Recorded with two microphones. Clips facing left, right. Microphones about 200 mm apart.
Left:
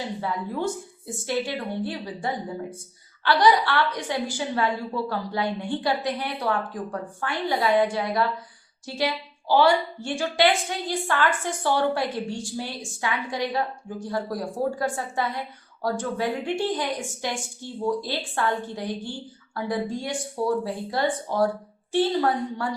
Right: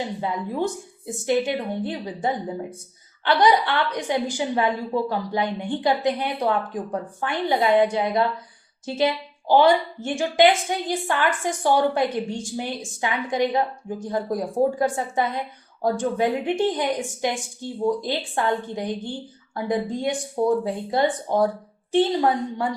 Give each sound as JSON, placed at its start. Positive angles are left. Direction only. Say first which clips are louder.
{"t": 0.2, "sound": "a woman's voice", "louder": "right 3 dB", "side_deg": -20}